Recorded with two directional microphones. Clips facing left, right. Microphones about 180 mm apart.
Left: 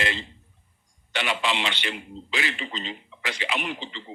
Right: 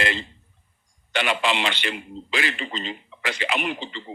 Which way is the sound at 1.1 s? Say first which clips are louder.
Right 3 dB; 55° right (ahead or behind).